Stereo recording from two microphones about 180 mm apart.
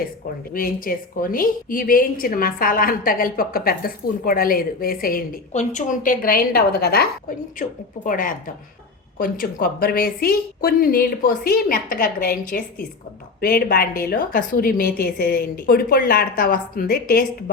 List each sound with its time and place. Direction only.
0.5 s a woman's voice: 50° left (ahead or behind)